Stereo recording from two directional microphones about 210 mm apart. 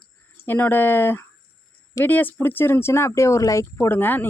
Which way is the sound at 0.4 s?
10° left (ahead or behind).